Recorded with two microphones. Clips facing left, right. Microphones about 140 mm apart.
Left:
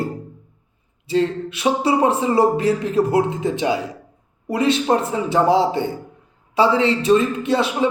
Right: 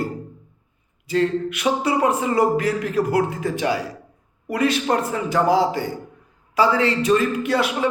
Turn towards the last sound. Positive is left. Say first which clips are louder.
# left 2 dB
turn(degrees=25)  # may be behind; listen again after turning